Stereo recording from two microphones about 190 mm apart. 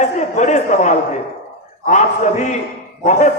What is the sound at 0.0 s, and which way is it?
Speech, 40° left (ahead or behind).